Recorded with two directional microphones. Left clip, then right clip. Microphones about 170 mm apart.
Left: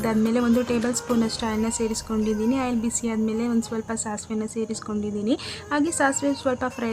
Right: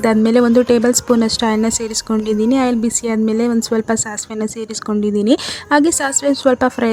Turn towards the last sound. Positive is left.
turn(degrees=-40)  # may be behind; listen again after turning